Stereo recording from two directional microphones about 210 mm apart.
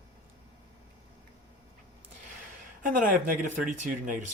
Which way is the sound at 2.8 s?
40° right (ahead or behind).